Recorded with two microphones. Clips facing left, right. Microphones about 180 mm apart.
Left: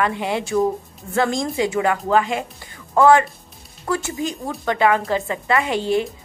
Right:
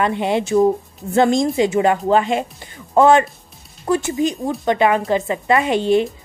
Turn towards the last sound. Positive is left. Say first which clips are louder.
# right 4 dB
turn(degrees=-20)  # may be behind; listen again after turning